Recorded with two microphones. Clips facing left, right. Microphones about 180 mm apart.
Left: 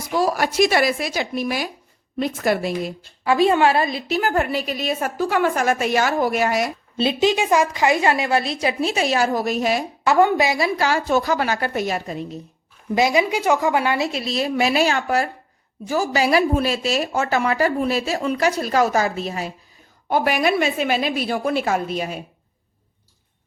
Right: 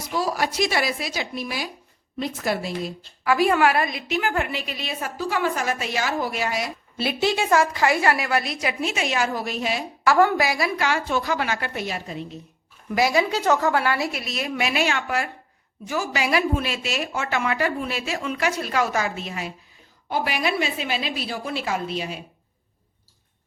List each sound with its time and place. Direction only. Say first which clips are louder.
0.1 s a woman's voice: left 4 dB; 55° left (ahead or behind)
3.2 s a woman's voice: left 3 dB; 25° left (ahead or behind); by 6.7 s 50° left (ahead or behind)
6.9 s a woman's voice: left 4 dB; 20° left (ahead or behind); by 9.8 s 45° left (ahead or behind)
10.0 s a woman's voice: left 2 dB; 20° left (ahead or behind)
10.8 s a woman's voice: left 4 dB; 35° left (ahead or behind)
12.9 s a woman's voice: left 3 dB; 20° left (ahead or behind); by 19.5 s 40° left (ahead or behind)
20.1 s a woman's voice: left 6 dB; 50° left (ahead or behind)